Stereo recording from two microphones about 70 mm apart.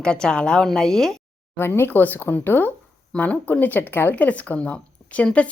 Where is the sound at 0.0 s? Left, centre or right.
Centre.